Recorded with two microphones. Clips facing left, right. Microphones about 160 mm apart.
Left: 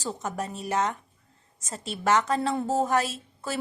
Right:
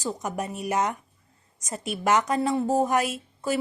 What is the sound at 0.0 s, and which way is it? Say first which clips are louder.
A woman's voice: right 2 dB; 15° right (ahead or behind).